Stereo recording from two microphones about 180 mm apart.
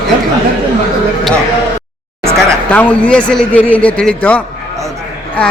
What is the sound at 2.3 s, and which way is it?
A man's voice, 5° left (ahead or behind).